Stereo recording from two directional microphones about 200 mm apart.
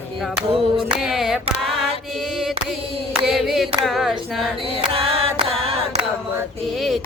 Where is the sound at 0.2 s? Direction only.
Centre (ahead or behind).